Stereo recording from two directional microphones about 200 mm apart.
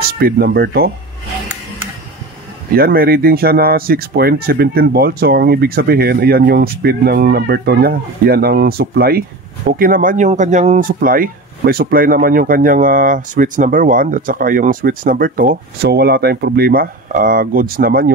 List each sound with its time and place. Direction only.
0.2 s speech: 50° right (ahead or behind)
2.7 s speech: 50° right (ahead or behind)